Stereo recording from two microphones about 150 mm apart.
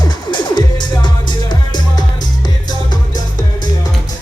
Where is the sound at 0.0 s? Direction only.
30° left (ahead or behind).